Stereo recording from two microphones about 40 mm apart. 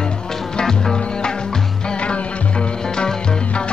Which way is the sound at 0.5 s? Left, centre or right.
Centre.